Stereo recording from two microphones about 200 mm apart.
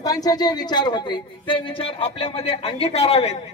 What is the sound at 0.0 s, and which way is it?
A woman's voice, 20° left (ahead or behind).